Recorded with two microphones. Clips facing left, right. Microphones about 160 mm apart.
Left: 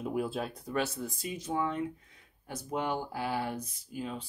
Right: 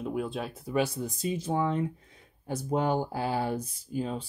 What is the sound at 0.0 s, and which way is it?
Speech, 5° left (ahead or behind).